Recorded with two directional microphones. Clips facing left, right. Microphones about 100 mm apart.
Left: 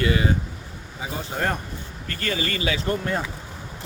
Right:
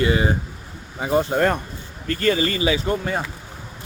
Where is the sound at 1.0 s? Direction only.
60° right (ahead or behind).